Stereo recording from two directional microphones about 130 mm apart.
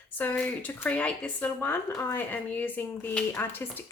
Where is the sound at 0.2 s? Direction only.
15° left (ahead or behind).